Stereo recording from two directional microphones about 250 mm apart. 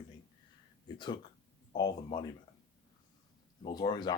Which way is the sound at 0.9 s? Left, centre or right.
Centre.